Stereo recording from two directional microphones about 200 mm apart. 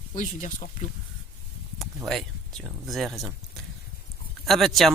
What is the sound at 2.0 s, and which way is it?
Speech, centre (ahead or behind).